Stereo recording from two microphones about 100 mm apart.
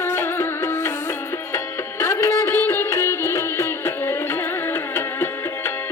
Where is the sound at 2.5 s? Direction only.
20° left (ahead or behind).